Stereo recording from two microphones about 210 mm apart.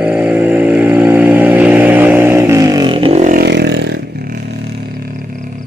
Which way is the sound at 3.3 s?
50° right (ahead or behind).